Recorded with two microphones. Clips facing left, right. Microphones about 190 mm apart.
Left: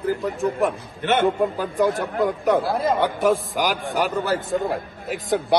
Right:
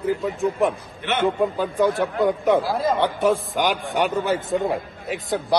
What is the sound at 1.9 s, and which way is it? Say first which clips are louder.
A man's voice: right 2 dB; centre (ahead or behind).